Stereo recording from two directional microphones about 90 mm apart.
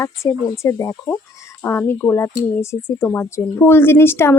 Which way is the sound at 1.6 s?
20° left (ahead or behind).